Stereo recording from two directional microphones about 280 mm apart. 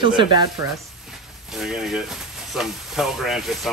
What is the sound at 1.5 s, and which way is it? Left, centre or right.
Speech, centre.